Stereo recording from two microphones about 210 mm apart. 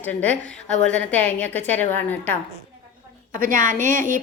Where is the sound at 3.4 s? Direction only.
40° right (ahead or behind).